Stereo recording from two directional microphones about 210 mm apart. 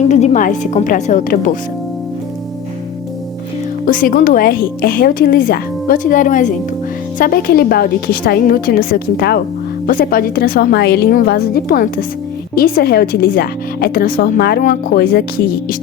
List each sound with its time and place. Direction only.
0.0 s a woman's voice: 35° left (ahead or behind)
3.8 s a woman's voice: 40° left (ahead or behind)